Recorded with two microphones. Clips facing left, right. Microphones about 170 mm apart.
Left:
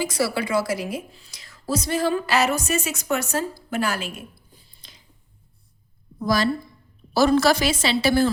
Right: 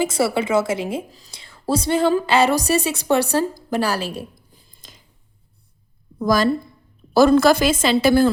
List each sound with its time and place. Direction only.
0.0 s a woman's voice: 25° right (ahead or behind)
4.7 s a sound: 45° right (ahead or behind)
6.2 s a woman's voice: 50° right (ahead or behind)